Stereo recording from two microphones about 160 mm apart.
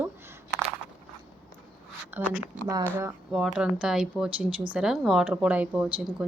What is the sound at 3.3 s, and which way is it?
A woman's voice, 5° right (ahead or behind).